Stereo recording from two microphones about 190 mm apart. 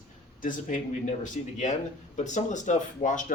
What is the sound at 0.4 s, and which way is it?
Speech, 40° left (ahead or behind).